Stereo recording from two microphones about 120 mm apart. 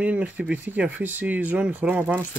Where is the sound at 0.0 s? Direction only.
15° right (ahead or behind).